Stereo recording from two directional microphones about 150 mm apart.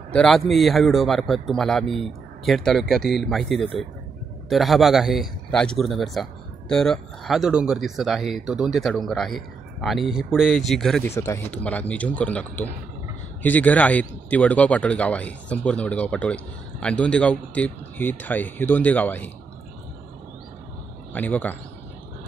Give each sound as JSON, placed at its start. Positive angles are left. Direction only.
{"t": 0.1, "sound": "speech", "side_deg": 5}
{"t": 11.1, "sound": "speech", "side_deg": 20}
{"t": 11.5, "sound": "speech", "side_deg": 10}
{"t": 21.1, "sound": "speech", "side_deg": 10}